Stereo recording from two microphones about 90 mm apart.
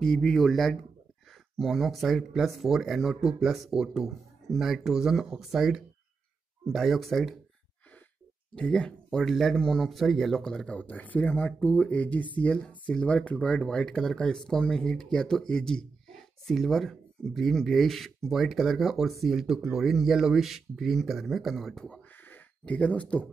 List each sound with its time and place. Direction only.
0.0 s speech: 5° left (ahead or behind)
8.5 s speech: 10° left (ahead or behind)
22.1 s a sound: 20° left (ahead or behind)